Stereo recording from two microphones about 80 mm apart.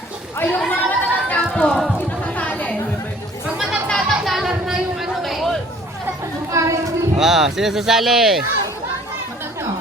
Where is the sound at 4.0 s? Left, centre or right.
Centre.